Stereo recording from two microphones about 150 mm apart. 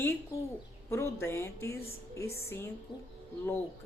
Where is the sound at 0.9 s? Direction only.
15° left (ahead or behind).